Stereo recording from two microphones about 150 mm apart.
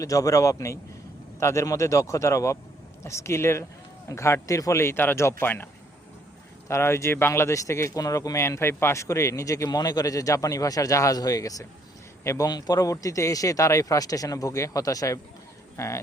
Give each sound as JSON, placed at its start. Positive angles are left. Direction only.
{"t": 0.0, "sound": "speech", "side_deg": 20}
{"t": 6.7, "sound": "speech", "side_deg": 20}